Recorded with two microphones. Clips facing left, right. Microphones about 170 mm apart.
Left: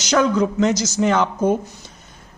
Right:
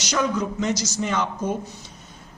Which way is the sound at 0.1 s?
90° left.